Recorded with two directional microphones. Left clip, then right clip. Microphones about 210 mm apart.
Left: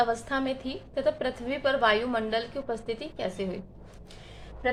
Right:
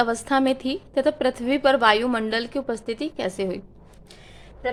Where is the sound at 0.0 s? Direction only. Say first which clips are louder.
Right 6 dB; 55° right (ahead or behind).